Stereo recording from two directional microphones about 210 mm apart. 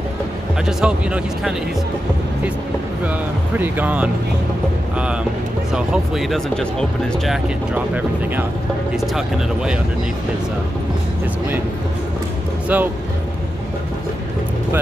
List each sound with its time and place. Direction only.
0.7 s speech: 5° right (ahead or behind)
3.5 s speech: 10° right (ahead or behind)
5.7 s speech: centre (ahead or behind)
7.7 s speech: 10° right (ahead or behind)
12.6 s speech: 5° right (ahead or behind)